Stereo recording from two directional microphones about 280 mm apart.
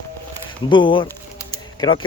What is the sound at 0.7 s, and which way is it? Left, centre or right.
Speech, centre.